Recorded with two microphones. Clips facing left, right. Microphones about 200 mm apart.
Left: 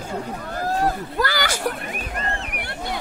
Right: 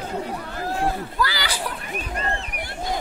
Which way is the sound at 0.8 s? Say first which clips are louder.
Even; 45° left (ahead or behind).